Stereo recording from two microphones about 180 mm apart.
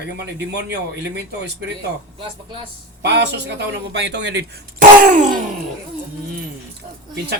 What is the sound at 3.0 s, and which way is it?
Speech, 70° right (ahead or behind).